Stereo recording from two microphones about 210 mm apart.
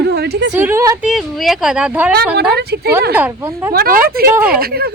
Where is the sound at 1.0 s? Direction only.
Centre (ahead or behind).